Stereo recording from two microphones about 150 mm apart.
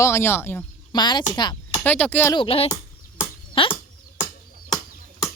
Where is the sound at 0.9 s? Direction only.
30° left (ahead or behind).